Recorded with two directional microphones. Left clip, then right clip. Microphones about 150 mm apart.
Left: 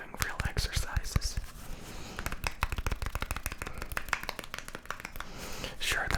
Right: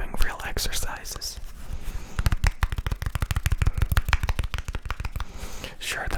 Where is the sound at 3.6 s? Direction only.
45° right (ahead or behind).